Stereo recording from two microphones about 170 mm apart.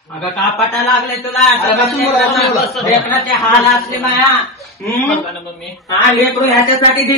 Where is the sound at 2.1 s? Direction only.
Centre (ahead or behind).